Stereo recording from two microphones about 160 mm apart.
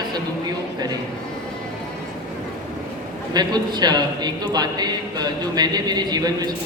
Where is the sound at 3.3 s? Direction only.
25° right (ahead or behind).